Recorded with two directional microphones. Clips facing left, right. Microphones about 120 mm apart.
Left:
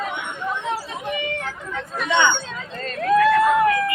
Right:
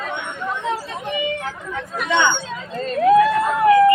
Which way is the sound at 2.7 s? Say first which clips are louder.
Right 5 dB; 15° right (ahead or behind).